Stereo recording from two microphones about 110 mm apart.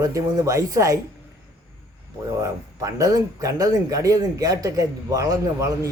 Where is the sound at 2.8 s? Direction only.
30° right (ahead or behind).